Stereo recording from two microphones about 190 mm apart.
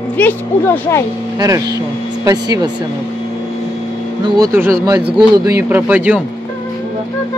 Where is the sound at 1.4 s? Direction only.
20° right (ahead or behind).